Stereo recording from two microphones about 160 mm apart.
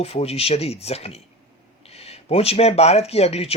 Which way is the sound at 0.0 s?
40° left (ahead or behind).